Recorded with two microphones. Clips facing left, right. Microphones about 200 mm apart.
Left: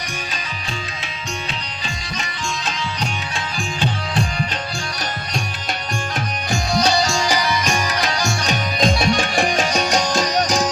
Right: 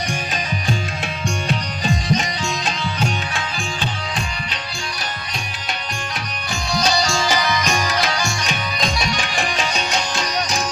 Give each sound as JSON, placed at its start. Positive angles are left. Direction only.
{"t": 1.5, "sound": "music", "side_deg": -45}
{"t": 6.5, "sound": "music", "side_deg": 50}
{"t": 7.0, "sound": "music", "side_deg": 15}
{"t": 8.2, "sound": "music", "side_deg": 40}